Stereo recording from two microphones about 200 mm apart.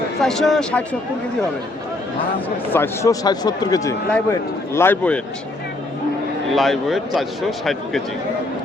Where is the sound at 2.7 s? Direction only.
10° left (ahead or behind).